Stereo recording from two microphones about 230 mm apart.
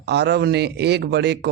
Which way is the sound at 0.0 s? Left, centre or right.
Right.